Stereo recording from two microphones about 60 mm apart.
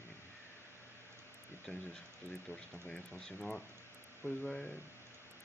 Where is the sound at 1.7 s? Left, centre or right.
Centre.